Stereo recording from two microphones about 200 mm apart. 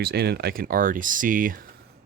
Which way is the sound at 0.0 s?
55° right (ahead or behind).